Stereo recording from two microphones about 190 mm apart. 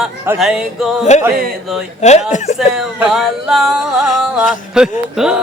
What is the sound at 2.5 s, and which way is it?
Music, centre (ahead or behind).